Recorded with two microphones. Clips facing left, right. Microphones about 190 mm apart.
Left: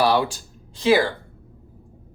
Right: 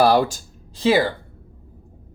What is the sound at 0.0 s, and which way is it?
Speech, 45° right (ahead or behind).